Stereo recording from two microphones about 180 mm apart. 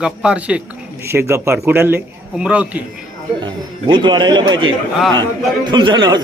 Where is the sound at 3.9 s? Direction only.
25° right (ahead or behind).